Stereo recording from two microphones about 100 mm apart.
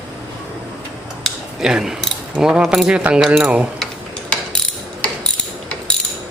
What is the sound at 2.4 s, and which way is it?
Speech, 5° right (ahead or behind).